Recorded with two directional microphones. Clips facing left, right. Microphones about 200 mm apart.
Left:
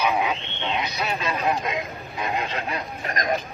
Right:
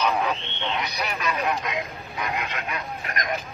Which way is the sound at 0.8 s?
25° left (ahead or behind).